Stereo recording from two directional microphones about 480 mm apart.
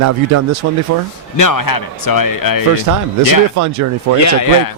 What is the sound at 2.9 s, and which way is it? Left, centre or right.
Speech, right.